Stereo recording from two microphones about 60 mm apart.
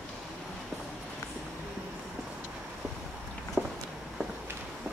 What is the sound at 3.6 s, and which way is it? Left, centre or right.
Walk, right.